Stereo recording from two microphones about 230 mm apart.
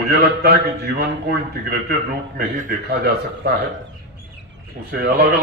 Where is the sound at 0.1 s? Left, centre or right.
Right.